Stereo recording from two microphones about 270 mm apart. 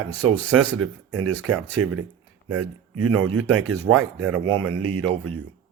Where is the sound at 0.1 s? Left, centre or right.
Right.